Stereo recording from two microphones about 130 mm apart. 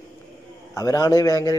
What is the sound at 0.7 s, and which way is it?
Speech, 30° left (ahead or behind).